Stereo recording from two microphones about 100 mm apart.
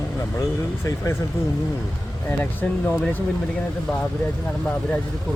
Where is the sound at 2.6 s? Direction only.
15° left (ahead or behind).